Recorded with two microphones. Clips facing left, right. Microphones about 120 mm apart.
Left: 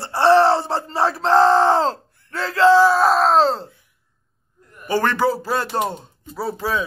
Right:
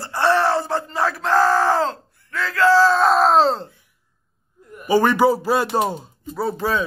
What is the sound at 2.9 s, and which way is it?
Speech, centre (ahead or behind).